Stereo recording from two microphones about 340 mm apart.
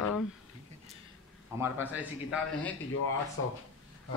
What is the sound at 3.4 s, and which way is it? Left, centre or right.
Speech, left.